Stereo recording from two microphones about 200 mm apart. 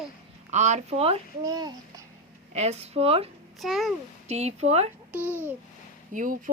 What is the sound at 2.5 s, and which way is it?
Speech, 30° right (ahead or behind).